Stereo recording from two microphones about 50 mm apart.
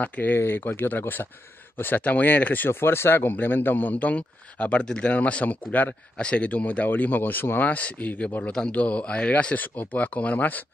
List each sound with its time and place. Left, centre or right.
0.0 s speech: left
0.4 s speech: left
2.7 s speech: left
6.1 s speech: left
6.9 s speech: left
8.5 s a man's voice: centre
8.7 s speech: left